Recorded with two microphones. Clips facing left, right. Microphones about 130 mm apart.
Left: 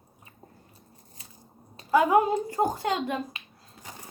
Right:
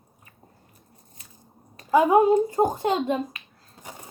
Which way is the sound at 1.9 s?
20° right (ahead or behind).